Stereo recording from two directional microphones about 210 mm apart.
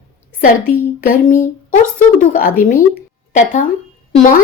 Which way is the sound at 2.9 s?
40° left (ahead or behind).